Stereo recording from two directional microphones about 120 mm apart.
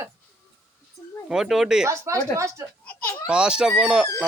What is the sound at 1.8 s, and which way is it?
Speech, 25° right (ahead or behind).